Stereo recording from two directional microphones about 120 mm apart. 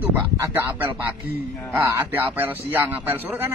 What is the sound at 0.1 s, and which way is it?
Speech, 20° right (ahead or behind).